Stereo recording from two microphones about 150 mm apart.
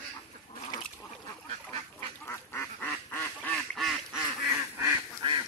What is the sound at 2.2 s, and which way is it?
Quack, 15° left (ahead or behind).